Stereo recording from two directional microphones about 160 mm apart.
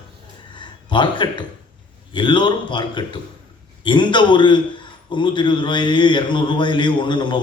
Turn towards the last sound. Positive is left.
turn(degrees=30)  # may be behind; listen again after turning